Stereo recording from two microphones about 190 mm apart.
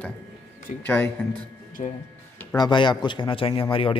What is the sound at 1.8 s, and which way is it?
Speech, 35° left (ahead or behind).